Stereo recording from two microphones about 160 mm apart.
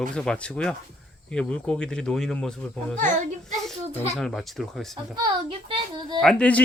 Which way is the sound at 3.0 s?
50° right (ahead or behind).